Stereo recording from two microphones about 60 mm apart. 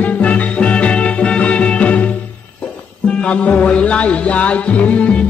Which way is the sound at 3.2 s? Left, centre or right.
Centre.